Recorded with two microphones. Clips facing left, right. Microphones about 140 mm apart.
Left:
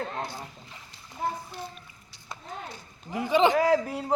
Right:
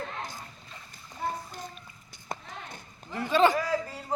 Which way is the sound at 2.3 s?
55° right (ahead or behind).